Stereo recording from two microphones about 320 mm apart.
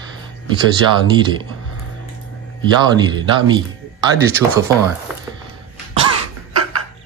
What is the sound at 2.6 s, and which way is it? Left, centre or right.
Speech, centre.